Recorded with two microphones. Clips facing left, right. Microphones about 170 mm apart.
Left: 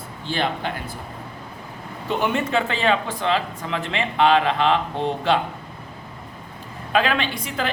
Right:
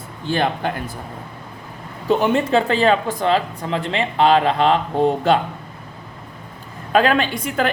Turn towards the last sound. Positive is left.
turn(degrees=-50)  # may be behind; listen again after turning